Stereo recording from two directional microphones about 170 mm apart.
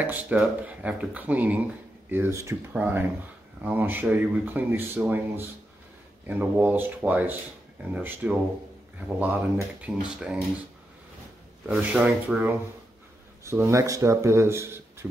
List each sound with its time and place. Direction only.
0.0 s speech: 10° right (ahead or behind)
11.6 s speech: 5° right (ahead or behind)